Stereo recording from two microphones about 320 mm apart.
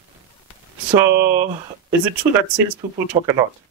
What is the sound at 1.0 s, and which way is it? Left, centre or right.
Speech, centre.